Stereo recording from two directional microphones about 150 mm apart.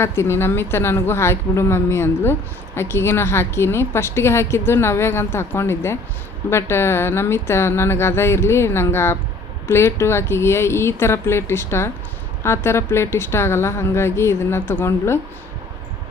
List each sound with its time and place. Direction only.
0.0 s a woman's voice: 15° left (ahead or behind)